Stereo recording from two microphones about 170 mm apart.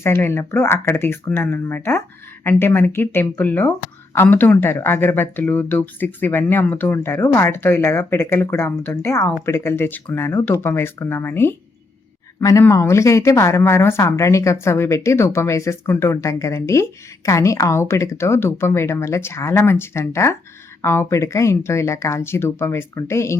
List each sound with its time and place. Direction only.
0.0 s speech: 15° left (ahead or behind)